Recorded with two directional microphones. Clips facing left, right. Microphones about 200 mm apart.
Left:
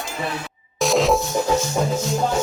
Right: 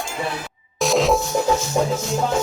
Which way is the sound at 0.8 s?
Centre (ahead or behind).